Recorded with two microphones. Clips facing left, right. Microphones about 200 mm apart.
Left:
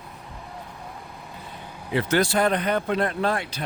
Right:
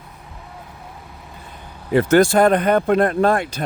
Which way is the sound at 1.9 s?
50° right (ahead or behind).